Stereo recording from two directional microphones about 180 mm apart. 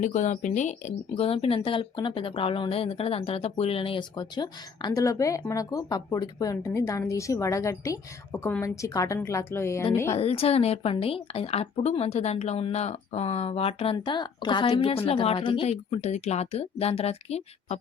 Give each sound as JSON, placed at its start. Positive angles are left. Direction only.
{"t": 0.0, "sound": "speech", "side_deg": 40}
{"t": 10.1, "sound": "speech", "side_deg": 35}